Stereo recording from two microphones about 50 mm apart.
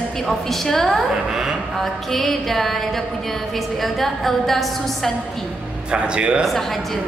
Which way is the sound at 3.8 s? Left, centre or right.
Centre.